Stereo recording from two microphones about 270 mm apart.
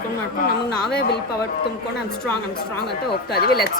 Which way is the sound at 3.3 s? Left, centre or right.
Left.